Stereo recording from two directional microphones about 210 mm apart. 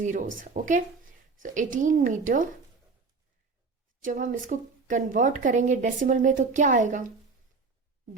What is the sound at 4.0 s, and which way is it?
A woman's voice, 40° right (ahead or behind).